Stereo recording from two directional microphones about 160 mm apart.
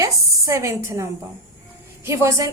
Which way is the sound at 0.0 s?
20° right (ahead or behind).